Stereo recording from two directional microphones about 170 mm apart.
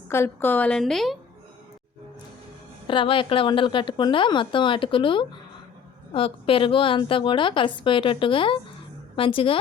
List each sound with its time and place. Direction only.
0.1 s a woman's voice: 15° left (ahead or behind)
2.8 s a woman's voice: 30° left (ahead or behind)